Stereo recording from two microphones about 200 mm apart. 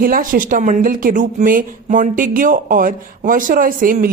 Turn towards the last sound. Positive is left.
turn(degrees=-45)  # may be behind; listen again after turning